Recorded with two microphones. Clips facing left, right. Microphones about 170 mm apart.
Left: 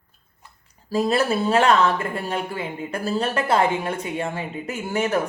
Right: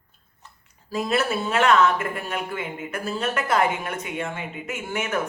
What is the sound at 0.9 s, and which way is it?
Speech, 35° left (ahead or behind).